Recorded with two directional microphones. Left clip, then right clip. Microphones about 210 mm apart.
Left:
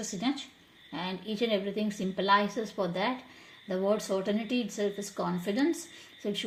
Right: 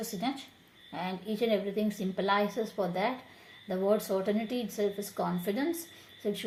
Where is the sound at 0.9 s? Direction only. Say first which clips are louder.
Even; 30° left (ahead or behind).